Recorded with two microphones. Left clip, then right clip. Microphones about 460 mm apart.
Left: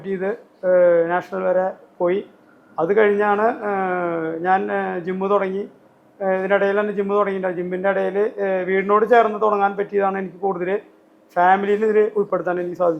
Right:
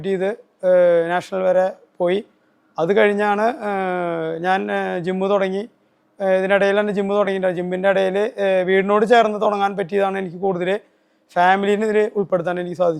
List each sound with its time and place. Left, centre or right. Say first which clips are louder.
0.0 s a man's voice: right 3 dB; right
11.3 s a man's voice: even; right